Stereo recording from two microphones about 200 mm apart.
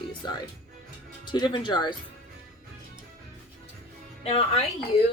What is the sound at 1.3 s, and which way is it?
Speech, 20° left (ahead or behind).